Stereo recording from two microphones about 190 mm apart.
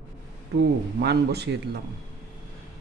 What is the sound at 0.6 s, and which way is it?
A man's voice, 60° right (ahead or behind).